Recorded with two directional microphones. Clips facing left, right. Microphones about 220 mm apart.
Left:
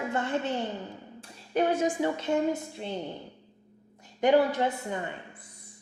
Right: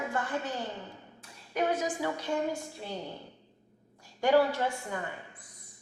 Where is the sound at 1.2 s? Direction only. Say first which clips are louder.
Left 4 dB; 30° left (ahead or behind).